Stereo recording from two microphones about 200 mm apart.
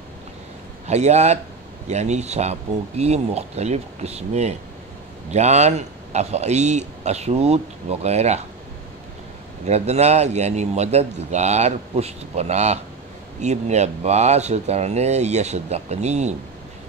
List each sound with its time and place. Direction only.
0.8 s speech: 35° right (ahead or behind)
9.7 s speech: 35° right (ahead or behind)